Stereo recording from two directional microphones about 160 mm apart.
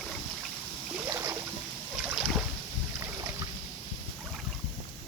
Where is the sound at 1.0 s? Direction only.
15° right (ahead or behind).